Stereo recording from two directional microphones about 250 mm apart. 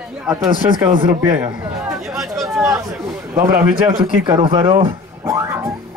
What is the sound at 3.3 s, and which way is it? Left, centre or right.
Speech, centre.